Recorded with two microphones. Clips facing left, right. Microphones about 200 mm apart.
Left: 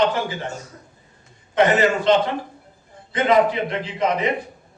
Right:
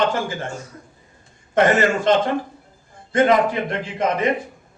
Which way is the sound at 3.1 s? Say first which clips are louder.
Right 1 dB; 50° right (ahead or behind).